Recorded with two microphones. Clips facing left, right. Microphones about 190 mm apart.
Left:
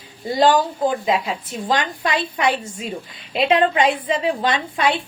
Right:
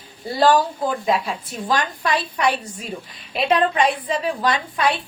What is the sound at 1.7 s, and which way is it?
A woman's voice, 20° left (ahead or behind).